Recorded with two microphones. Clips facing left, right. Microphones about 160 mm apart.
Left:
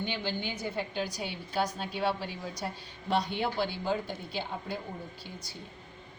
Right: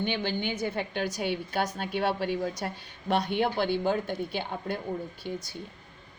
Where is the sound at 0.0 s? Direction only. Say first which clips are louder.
Right 4 dB; 65° right (ahead or behind).